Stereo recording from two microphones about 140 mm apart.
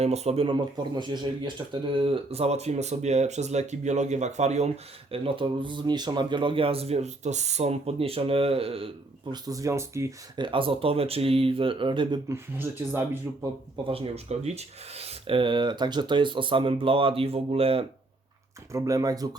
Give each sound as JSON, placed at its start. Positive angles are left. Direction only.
{"t": 0.0, "sound": "speech", "side_deg": -50}
{"t": 5.1, "sound": "speech", "side_deg": -40}
{"t": 9.3, "sound": "speech", "side_deg": -25}
{"t": 10.3, "sound": "speech", "side_deg": -35}
{"t": 12.3, "sound": "speech", "side_deg": -15}
{"t": 13.8, "sound": "speech", "side_deg": -40}
{"t": 18.7, "sound": "speech", "side_deg": -25}